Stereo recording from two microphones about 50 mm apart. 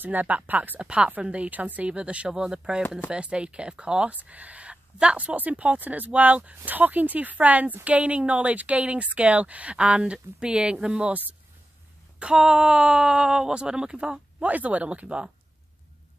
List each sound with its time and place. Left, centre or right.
0.0 s speech: right
0.7 s speech: right
4.1 s speech: right
12.2 s speech: centre
14.5 s speech: right